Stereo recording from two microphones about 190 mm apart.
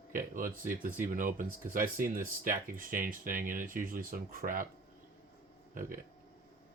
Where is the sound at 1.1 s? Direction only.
45° right (ahead or behind).